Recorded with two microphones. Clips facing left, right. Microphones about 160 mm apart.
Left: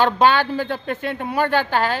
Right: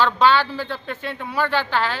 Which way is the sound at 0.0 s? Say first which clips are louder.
Left 1 dB; 50° left (ahead or behind).